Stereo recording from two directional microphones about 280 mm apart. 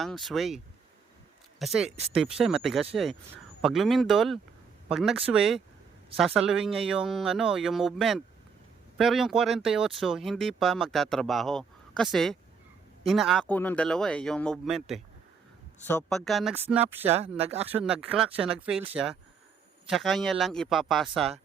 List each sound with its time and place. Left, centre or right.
0.0 s speech: centre
17.1 s speech: right
17.7 s speech: centre
19.9 s speech: centre